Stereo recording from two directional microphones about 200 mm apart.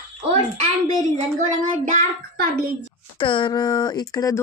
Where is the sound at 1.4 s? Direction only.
40° right (ahead or behind).